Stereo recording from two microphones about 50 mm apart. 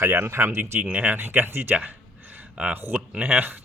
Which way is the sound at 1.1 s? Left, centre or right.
Right.